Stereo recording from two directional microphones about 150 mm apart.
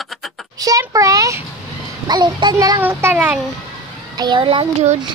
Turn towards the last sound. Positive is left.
turn(degrees=-45)  # may be behind; listen again after turning